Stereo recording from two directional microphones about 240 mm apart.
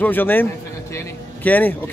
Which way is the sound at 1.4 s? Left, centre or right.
Centre.